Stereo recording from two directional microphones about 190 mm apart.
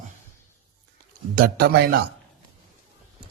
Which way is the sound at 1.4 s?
50° right (ahead or behind).